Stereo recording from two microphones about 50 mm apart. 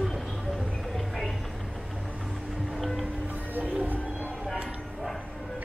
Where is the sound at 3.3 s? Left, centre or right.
Right.